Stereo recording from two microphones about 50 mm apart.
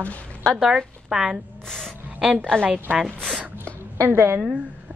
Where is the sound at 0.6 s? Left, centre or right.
Centre.